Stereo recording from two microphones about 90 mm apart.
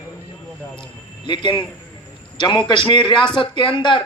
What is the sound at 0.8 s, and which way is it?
A man's voice, 60° left (ahead or behind).